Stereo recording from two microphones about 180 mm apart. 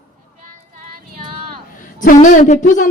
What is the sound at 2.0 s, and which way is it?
Speech, 45° left (ahead or behind).